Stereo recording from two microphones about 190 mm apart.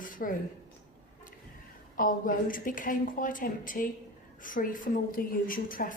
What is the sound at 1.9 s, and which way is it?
A woman's voice, 45° left (ahead or behind).